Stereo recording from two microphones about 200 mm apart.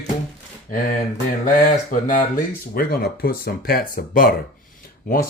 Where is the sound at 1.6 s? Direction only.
40° left (ahead or behind).